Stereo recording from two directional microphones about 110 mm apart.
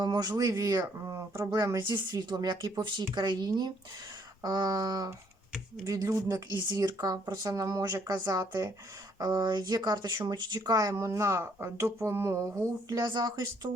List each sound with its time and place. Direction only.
0.0 s speech: 40° right (ahead or behind)
13.0 s speech: 40° right (ahead or behind)